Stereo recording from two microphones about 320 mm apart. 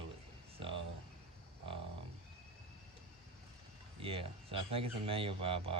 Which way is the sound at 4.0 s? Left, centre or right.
Centre.